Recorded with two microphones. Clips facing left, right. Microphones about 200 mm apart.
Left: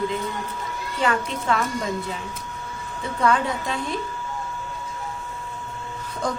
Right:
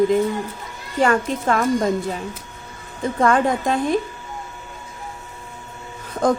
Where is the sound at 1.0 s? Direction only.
45° right (ahead or behind).